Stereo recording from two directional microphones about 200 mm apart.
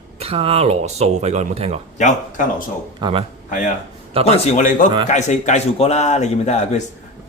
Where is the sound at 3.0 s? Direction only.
25° right (ahead or behind).